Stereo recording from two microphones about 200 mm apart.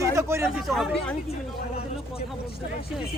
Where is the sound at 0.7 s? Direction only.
Centre (ahead or behind).